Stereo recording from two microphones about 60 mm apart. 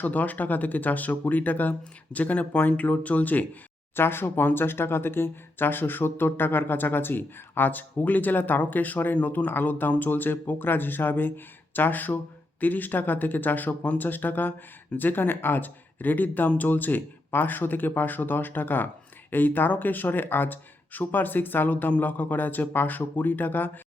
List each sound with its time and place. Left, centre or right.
0.0 s speech: left
3.9 s speech: left